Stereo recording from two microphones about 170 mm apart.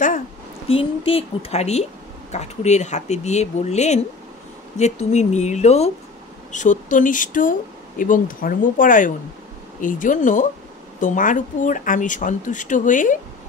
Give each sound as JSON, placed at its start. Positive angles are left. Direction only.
{"t": 0.7, "sound": "speech", "side_deg": 35}